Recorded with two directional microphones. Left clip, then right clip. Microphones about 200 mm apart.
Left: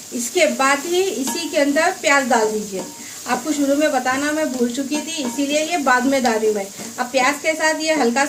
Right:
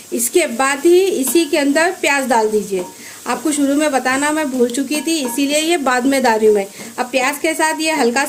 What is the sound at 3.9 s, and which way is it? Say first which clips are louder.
A woman's voice: right 3 dB; 45° right (ahead or behind).